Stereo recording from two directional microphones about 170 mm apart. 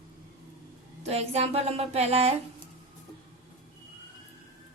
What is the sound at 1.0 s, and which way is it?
Speech, 40° right (ahead or behind).